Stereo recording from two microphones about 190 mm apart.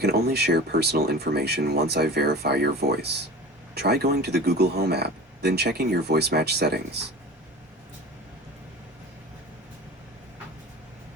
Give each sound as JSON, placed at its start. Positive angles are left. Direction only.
{"t": 0.0, "sound": "speech", "side_deg": -55}